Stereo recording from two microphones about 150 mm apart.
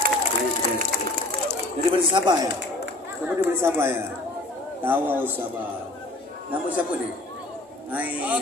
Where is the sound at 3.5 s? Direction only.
15° right (ahead or behind).